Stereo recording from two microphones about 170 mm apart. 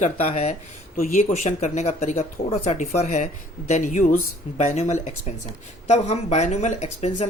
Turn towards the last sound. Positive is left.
turn(degrees=40)  # may be behind; listen again after turning